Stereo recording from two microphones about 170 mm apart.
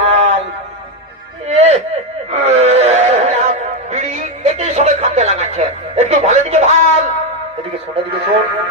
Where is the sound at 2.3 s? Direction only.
40° right (ahead or behind).